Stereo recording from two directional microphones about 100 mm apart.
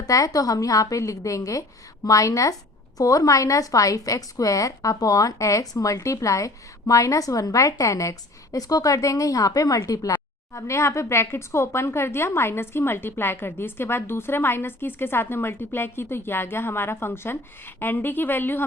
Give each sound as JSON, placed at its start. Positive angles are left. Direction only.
{"t": 0.0, "sound": "a woman's voice", "side_deg": 35}